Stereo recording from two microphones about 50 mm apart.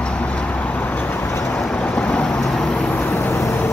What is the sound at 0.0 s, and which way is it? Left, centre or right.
Vehicle, left.